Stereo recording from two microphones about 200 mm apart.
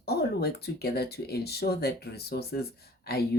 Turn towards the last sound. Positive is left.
turn(degrees=50)  # may be behind; listen again after turning